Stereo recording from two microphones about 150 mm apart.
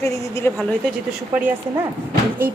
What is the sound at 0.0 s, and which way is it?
Speech, 20° left (ahead or behind).